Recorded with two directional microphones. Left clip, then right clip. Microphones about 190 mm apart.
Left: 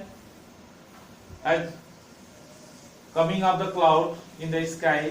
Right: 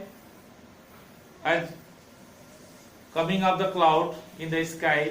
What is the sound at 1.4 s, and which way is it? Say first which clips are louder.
Speech: left 1 dB; 30° right (ahead or behind).